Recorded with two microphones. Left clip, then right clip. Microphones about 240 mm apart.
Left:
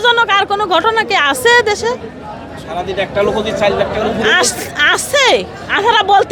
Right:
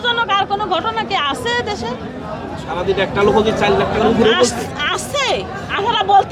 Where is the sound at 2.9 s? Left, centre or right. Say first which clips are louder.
Right 1 dB; left.